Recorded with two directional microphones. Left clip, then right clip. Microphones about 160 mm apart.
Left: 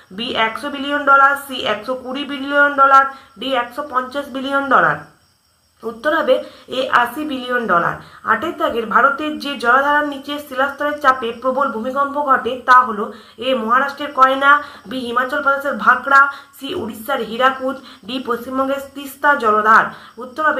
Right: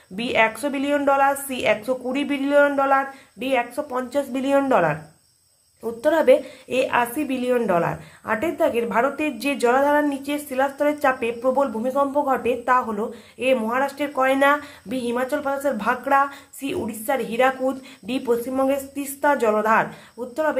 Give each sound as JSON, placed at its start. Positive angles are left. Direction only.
{"t": 0.2, "sound": "a woman's voice", "side_deg": -35}
{"t": 5.9, "sound": "a woman's voice", "side_deg": -35}
{"t": 19.2, "sound": "a woman's voice", "side_deg": -30}